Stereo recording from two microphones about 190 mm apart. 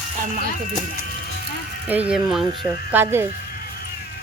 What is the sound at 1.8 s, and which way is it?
Speech, 10° right (ahead or behind).